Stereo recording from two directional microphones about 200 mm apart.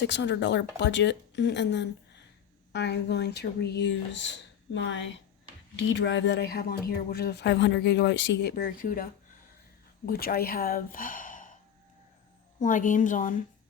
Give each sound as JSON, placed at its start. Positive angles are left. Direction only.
{"t": 0.0, "sound": "speech", "side_deg": 60}
{"t": 10.1, "sound": "speech", "side_deg": 50}
{"t": 12.5, "sound": "a woman's voice", "side_deg": 40}